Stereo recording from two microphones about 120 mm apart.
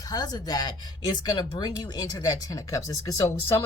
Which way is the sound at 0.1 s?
35° left (ahead or behind).